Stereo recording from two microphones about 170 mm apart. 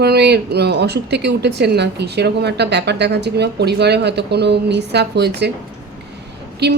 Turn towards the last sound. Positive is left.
turn(degrees=-75)  # may be behind; listen again after turning